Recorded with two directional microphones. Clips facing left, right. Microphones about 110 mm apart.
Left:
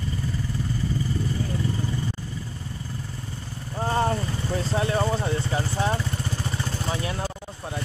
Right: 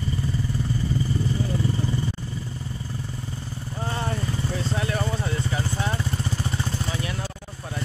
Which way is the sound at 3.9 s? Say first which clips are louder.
Left 5 dB; 40° left (ahead or behind).